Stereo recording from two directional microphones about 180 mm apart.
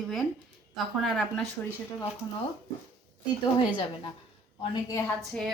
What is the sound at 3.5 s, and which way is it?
Speech, 25° left (ahead or behind).